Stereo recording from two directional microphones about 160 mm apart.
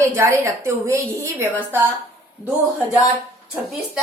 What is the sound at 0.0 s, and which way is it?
A woman's voice, 15° right (ahead or behind).